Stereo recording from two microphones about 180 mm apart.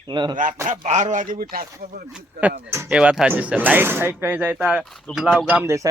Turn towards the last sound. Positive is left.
turn(degrees=-15)  # may be behind; listen again after turning